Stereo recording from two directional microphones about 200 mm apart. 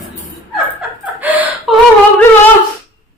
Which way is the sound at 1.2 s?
10° right (ahead or behind).